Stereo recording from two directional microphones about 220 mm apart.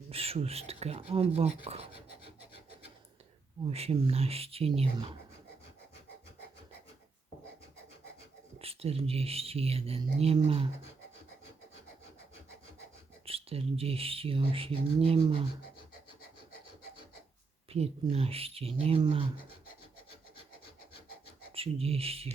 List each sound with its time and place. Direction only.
0.1 s speech: 25° right (ahead or behind)
1.6 s pant: 25° right (ahead or behind)
3.6 s speech: 25° right (ahead or behind)
8.5 s speech: 25° right (ahead or behind)
13.2 s speech: 25° right (ahead or behind)
17.7 s speech: 30° right (ahead or behind)
21.5 s speech: 25° right (ahead or behind)